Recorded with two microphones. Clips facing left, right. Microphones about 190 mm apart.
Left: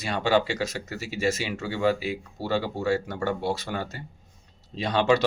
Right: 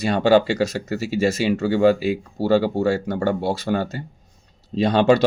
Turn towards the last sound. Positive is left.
turn(degrees=-35)  # may be behind; listen again after turning